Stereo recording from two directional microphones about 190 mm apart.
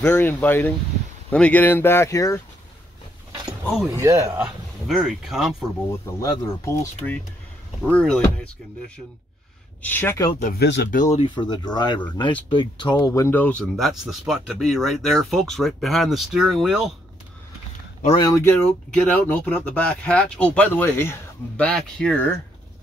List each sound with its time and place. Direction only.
0.0 s speech: 10° left (ahead or behind)
3.9 s speech: 15° right (ahead or behind)
4.4 s speech: centre (ahead or behind)
5.9 s speech: 15° left (ahead or behind)
7.8 s speech: 5° left (ahead or behind)
9.8 s speech: 10° left (ahead or behind)
10.6 s speech: 65° left (ahead or behind)
10.9 s speech: 40° left (ahead or behind)
11.2 s speech: 25° left (ahead or behind); by 16.9 s centre (ahead or behind)
18.0 s speech: 25° left (ahead or behind); by 22.3 s 5° left (ahead or behind)